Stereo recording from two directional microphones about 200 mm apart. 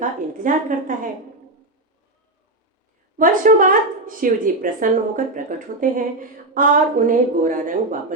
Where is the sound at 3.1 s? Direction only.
40° right (ahead or behind).